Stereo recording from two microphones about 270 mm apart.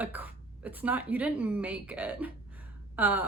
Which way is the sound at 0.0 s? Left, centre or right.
Centre.